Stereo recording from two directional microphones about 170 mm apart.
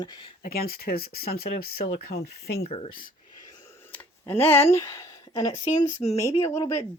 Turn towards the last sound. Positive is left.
turn(degrees=20)  # may be behind; listen again after turning